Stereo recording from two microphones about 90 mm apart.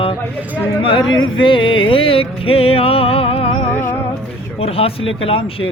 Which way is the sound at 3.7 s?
20° left (ahead or behind).